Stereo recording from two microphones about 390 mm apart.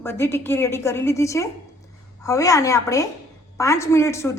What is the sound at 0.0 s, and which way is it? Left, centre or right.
A woman's voice, centre.